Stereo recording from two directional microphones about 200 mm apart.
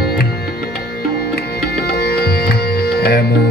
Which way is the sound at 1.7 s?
50° left (ahead or behind).